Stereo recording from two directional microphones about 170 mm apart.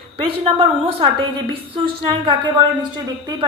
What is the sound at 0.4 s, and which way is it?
A woman's voice, 35° right (ahead or behind).